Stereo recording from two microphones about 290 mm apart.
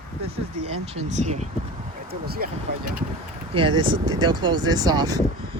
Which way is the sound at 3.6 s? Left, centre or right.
Centre.